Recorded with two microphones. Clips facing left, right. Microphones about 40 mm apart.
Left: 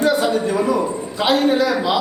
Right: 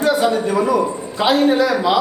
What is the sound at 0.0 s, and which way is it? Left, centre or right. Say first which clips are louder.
A man's voice: right 1 dB; centre.